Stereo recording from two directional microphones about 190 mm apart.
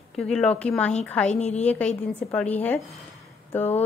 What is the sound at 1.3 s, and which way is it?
Speech, 35° left (ahead or behind).